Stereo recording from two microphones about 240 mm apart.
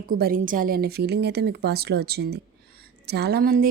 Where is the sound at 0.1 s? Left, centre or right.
Right.